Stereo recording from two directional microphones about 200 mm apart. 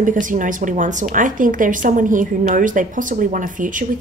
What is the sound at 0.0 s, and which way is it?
A woman's voice, 40° right (ahead or behind).